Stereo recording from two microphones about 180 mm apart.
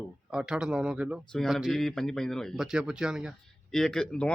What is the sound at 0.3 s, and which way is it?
Speech, 5° right (ahead or behind).